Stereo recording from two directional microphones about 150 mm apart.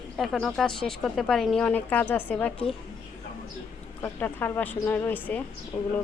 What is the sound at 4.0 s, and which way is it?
Speech, 15° left (ahead or behind).